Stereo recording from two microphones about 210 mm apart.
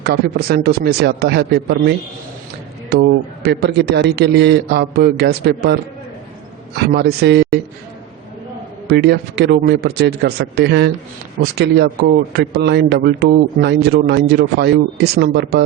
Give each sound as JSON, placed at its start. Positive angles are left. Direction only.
{"t": 0.0, "sound": "speech", "side_deg": -50}
{"t": 8.9, "sound": "speech", "side_deg": -50}